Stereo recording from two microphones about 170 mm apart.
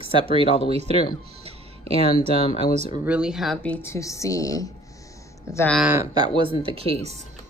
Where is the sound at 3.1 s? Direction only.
5° right (ahead or behind); by 5.6 s 20° left (ahead or behind).